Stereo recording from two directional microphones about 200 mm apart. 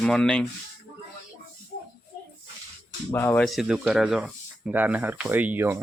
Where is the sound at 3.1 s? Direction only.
10° left (ahead or behind).